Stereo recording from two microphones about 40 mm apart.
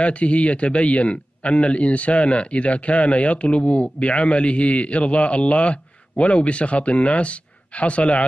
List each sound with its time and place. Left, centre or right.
0.0 s a man's voice: left